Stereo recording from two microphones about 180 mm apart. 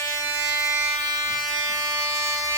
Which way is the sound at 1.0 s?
20° right (ahead or behind).